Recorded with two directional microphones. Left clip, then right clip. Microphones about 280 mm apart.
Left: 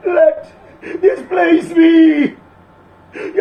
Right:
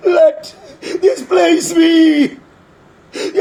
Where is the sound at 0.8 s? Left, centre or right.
Right.